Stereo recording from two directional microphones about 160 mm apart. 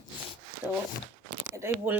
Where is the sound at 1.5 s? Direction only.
15° right (ahead or behind).